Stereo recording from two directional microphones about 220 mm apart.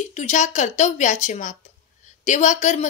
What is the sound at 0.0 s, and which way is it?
A woman's voice, 30° left (ahead or behind).